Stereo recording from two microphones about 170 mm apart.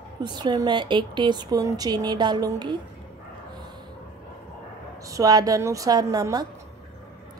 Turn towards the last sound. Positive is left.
turn(degrees=-20)  # may be behind; listen again after turning